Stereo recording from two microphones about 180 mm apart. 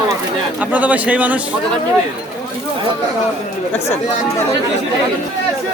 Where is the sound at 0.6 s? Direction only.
10° right (ahead or behind).